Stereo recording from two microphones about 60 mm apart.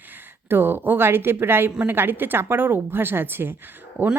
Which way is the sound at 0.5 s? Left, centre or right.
Right.